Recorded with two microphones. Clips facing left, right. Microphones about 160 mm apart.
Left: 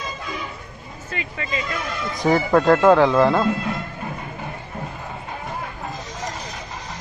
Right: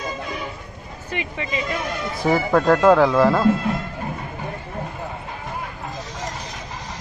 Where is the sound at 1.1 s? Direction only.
20° right (ahead or behind).